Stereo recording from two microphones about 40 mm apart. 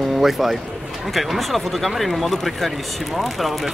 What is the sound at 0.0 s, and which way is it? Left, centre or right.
Speech, centre.